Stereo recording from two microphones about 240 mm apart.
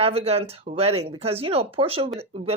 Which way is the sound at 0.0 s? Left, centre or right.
Right.